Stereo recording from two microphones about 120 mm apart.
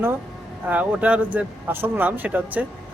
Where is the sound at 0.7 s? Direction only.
10° right (ahead or behind).